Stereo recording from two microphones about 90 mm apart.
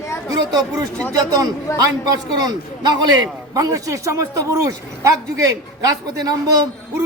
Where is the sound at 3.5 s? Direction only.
40° right (ahead or behind).